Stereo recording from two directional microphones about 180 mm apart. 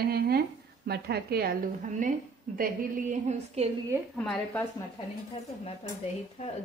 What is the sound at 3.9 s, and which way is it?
Speech, 10° right (ahead or behind).